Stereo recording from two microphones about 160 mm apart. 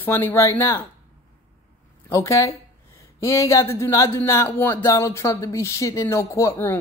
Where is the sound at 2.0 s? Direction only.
20° left (ahead or behind).